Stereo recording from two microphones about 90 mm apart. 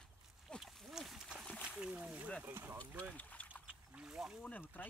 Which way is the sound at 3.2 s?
15° left (ahead or behind).